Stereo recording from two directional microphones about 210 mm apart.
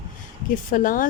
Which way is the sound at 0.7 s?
40° left (ahead or behind).